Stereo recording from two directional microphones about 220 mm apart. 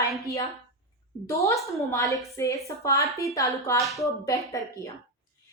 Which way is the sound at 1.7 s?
15° left (ahead or behind).